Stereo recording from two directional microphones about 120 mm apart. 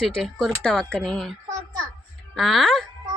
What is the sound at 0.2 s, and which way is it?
A woman's voice, 5° left (ahead or behind).